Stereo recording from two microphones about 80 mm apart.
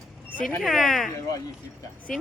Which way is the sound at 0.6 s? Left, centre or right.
Centre.